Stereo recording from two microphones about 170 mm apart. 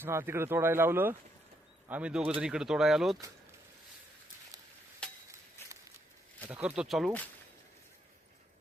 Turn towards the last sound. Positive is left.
turn(degrees=0)  # may be behind; listen again after turning